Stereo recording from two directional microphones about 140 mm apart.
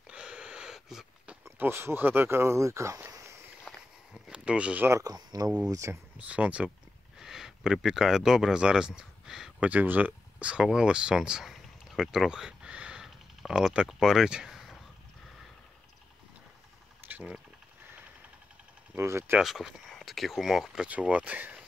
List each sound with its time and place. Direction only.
0.0 s wheeze: 5° right (ahead or behind)
1.4 s speech: 20° right (ahead or behind)
3.7 s walk: 5° left (ahead or behind)
4.1 s speech: 10° right (ahead or behind)
6.1 s speech: 10° right (ahead or behind)
17.1 s speech: 10° right (ahead or behind)
18.9 s speech: 15° right (ahead or behind)
19.4 s speech: centre (ahead or behind)